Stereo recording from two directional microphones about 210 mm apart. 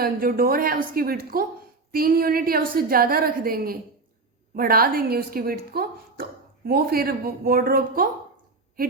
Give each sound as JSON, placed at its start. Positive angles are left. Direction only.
{"t": 0.0, "sound": "a woman's voice", "side_deg": -45}